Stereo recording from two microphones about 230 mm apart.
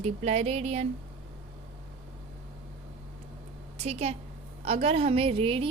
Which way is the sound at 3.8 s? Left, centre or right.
Right.